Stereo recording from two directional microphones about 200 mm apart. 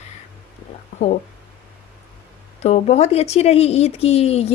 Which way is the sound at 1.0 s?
35° left (ahead or behind).